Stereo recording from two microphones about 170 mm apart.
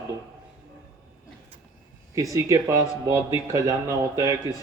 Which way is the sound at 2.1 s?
20° right (ahead or behind).